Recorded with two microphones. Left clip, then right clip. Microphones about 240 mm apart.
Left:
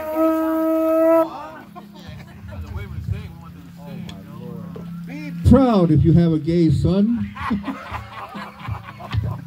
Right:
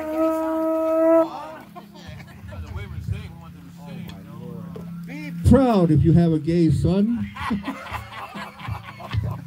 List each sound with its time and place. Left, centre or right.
0.0 s wind instrument: left
1.2 s a sound: right
4.7 s speech: right
7.2 s music: right